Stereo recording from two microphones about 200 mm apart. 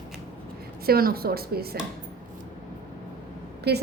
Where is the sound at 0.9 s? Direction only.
50° right (ahead or behind).